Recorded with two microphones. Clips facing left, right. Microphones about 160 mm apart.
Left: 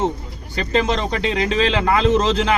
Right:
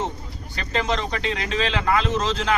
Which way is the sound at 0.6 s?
30° left (ahead or behind).